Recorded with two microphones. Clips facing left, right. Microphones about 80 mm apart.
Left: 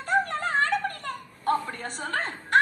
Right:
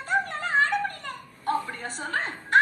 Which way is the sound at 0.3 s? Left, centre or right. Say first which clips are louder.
Right 1 dB; left.